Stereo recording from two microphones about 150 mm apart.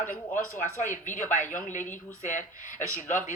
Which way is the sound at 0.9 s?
60° left (ahead or behind).